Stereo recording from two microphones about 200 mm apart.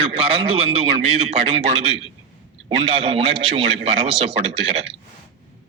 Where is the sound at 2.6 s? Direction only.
25° right (ahead or behind).